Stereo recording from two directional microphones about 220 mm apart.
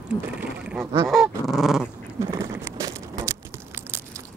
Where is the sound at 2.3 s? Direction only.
15° right (ahead or behind).